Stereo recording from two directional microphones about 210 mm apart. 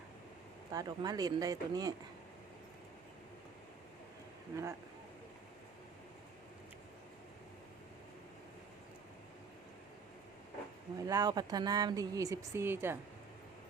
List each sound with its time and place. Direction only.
0.7 s speech: 20° right (ahead or behind)
4.5 s speech: 15° right (ahead or behind)
10.9 s speech: 15° right (ahead or behind)